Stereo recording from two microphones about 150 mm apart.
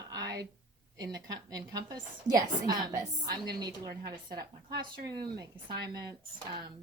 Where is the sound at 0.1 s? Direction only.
25° right (ahead or behind).